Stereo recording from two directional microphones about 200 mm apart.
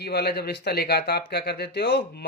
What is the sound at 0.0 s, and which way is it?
Speech, 55° left (ahead or behind).